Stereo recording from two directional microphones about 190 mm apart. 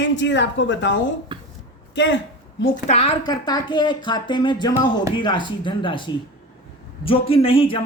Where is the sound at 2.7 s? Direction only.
35° left (ahead or behind).